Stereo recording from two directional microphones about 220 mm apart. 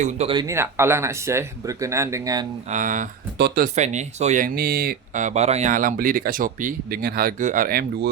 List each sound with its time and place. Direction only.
0.0 s speech: 30° right (ahead or behind)
2.6 s speech: 35° right (ahead or behind)
3.3 s speech: 45° right (ahead or behind)
3.8 s speech: 30° right (ahead or behind)